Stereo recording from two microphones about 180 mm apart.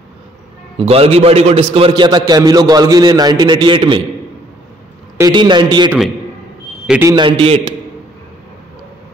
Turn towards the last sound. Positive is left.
turn(degrees=-30)  # may be behind; listen again after turning